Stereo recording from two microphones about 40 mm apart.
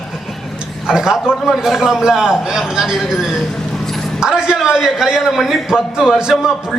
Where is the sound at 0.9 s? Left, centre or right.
Centre.